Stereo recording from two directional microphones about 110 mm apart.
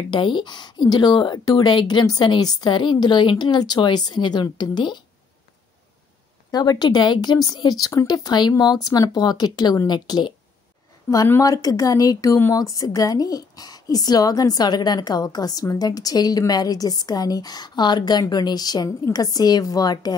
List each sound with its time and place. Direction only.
0.1 s speech: 45° left (ahead or behind)
6.5 s a woman's voice: 35° left (ahead or behind)
11.2 s a woman's voice: 25° left (ahead or behind)